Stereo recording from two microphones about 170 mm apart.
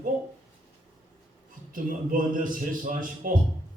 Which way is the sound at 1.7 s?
55° right (ahead or behind).